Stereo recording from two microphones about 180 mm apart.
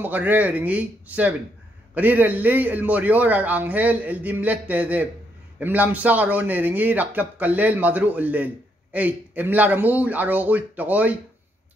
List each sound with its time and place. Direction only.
0.0 s a man's voice: 10° right (ahead or behind)